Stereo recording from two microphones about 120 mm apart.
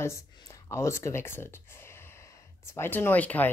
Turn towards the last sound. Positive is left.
turn(degrees=15)  # may be behind; listen again after turning